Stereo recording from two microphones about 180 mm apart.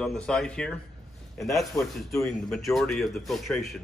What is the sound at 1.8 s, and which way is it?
Speech, 20° left (ahead or behind).